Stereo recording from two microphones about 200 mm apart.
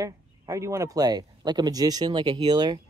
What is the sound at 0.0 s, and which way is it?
Speech, 15° right (ahead or behind).